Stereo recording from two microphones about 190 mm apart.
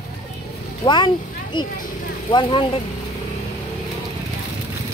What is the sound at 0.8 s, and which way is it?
Speech, 25° left (ahead or behind).